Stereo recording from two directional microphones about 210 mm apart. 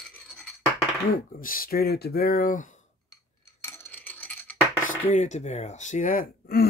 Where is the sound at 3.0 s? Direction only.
15° left (ahead or behind).